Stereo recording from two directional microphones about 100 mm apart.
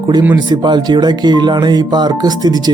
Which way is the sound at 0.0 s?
45° right (ahead or behind).